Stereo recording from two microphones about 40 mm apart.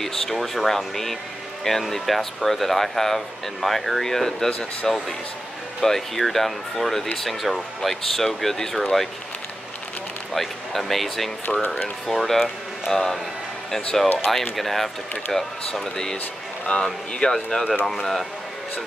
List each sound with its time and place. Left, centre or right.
0.0 s speech: centre
10.3 s speech: centre
12.9 s speech: centre